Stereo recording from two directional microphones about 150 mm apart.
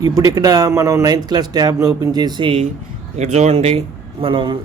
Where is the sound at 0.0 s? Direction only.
25° right (ahead or behind).